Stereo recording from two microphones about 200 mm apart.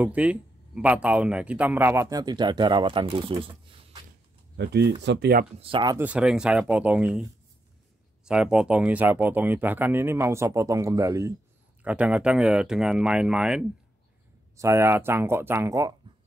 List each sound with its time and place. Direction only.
0.0 s speech: 5° right (ahead or behind); by 4.0 s 25° right (ahead or behind)
4.6 s speech: 60° right (ahead or behind)
5.6 s speech: 25° right (ahead or behind)
5.9 s speech: 5° right (ahead or behind)
8.3 s speech: 5° right (ahead or behind)